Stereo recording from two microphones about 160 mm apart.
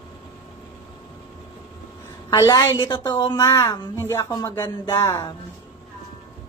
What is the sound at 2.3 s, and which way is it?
Speech, 25° left (ahead or behind).